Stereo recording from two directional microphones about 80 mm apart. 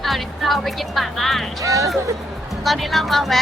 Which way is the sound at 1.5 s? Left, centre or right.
Right.